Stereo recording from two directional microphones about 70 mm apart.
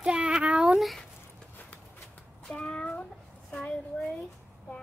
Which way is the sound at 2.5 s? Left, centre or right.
Centre.